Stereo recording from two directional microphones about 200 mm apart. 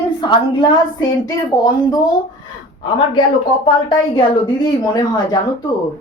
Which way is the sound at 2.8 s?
25° left (ahead or behind).